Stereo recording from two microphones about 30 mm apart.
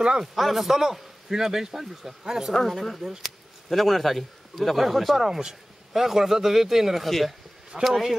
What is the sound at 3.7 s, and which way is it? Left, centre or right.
Speech, centre.